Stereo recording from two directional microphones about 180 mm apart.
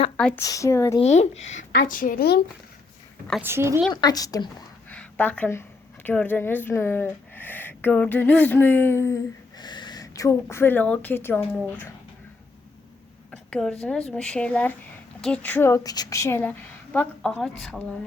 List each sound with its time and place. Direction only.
0.2 s speech: 5° left (ahead or behind)
0.4 s a woman's voice: 20° left (ahead or behind)
1.0 s speech: 35° left (ahead or behind)
1.9 s speech: 50° left (ahead or behind)
3.4 s a woman's voice: 15° right (ahead or behind)
3.9 s speech: 20° left (ahead or behind)
4.9 s a woman's voice: 10° left (ahead or behind)
13.3 s a sound: 5° left (ahead or behind)
14.1 s a woman's voice: 5° left (ahead or behind)